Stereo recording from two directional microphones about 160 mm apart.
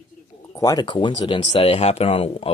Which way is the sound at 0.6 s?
25° left (ahead or behind).